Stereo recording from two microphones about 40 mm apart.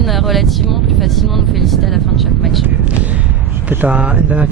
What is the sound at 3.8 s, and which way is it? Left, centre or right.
Speech, right.